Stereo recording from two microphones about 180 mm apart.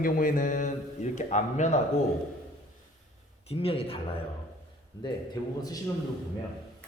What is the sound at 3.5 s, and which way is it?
Speech, 35° left (ahead or behind).